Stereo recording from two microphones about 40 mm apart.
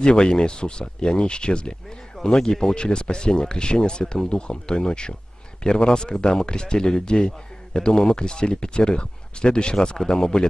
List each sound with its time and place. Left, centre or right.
0.0 s speech: centre